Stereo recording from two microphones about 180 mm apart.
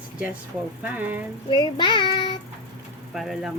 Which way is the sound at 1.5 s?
25° left (ahead or behind).